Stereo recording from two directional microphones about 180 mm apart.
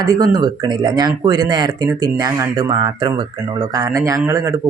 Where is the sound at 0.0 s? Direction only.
20° right (ahead or behind).